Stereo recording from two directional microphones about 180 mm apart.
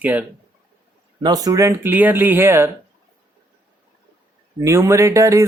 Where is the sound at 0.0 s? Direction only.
10° right (ahead or behind).